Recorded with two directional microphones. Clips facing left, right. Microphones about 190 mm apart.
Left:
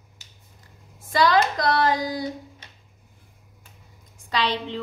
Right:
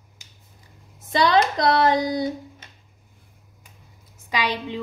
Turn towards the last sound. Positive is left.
turn(degrees=-10)  # may be behind; listen again after turning